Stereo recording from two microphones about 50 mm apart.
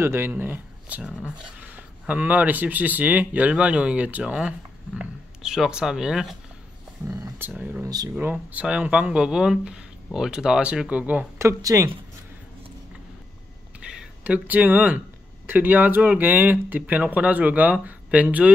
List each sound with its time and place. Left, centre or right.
0.0 s speech: right
0.9 s speech: right; by 6.3 s centre
7.5 s speech: right
8.6 s speech: right
11.3 s speech: right
13.8 s a sound: right
14.2 s speech: right